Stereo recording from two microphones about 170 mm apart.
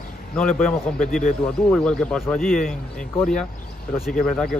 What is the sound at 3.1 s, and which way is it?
Speech, 5° left (ahead or behind).